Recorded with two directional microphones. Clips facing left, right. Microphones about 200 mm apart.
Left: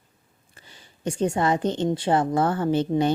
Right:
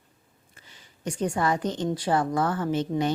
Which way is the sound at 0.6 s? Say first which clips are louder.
Left 4 dB; 30° left (ahead or behind).